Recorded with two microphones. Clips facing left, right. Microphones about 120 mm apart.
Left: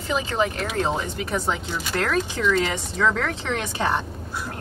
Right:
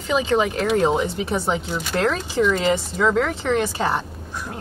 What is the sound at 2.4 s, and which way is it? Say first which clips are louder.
A woman's voice: right 4 dB; 20° right (ahead or behind).